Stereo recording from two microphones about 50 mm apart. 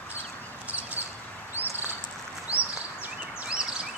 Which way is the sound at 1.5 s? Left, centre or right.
Right.